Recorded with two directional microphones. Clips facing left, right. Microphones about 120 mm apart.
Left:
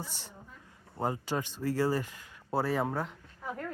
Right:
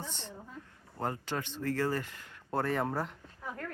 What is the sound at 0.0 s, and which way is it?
Speech, 5° left (ahead or behind).